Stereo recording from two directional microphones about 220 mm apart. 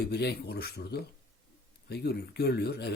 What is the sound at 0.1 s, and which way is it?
Speech, 45° left (ahead or behind).